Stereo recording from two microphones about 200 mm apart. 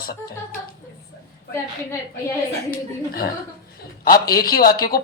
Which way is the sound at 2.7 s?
45° left (ahead or behind).